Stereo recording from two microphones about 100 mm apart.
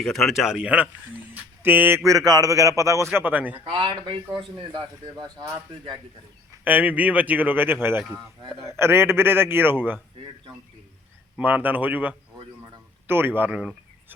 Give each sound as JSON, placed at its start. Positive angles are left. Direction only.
{"t": 0.0, "sound": "speech", "side_deg": 5}
{"t": 2.0, "sound": "a man's voice", "side_deg": -35}
{"t": 3.1, "sound": "speech", "side_deg": -15}
{"t": 3.6, "sound": "a man's voice", "side_deg": -55}
{"t": 6.7, "sound": "a man's voice", "side_deg": -15}
{"t": 11.3, "sound": "a man's voice", "side_deg": -15}